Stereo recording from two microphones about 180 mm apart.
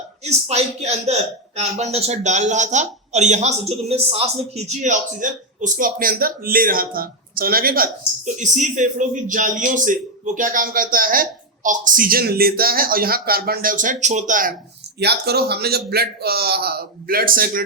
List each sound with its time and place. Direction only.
0.3 s a man's voice: 35° right (ahead or behind)
14.9 s a man's voice: 65° right (ahead or behind)